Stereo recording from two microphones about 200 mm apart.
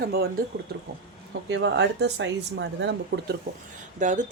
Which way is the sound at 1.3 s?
65° right (ahead or behind).